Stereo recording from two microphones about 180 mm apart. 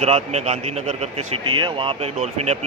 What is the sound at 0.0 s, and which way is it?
A man's voice, 35° right (ahead or behind).